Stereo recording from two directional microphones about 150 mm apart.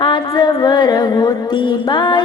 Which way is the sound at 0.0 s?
30° left (ahead or behind).